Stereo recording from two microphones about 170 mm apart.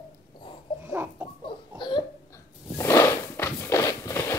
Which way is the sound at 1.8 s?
25° left (ahead or behind).